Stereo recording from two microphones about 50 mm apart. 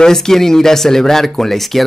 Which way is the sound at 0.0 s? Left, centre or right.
Centre.